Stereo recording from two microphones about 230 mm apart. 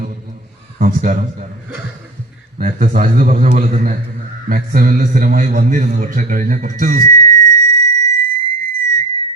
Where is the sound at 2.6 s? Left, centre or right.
Right.